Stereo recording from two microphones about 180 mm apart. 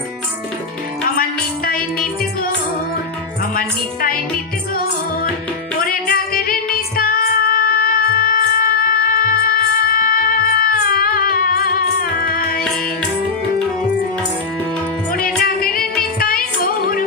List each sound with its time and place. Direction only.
1.1 s music: 55° left (ahead or behind)
3.5 s music: 50° left (ahead or behind)
5.8 s music: 55° left (ahead or behind)
15.1 s music: 55° left (ahead or behind)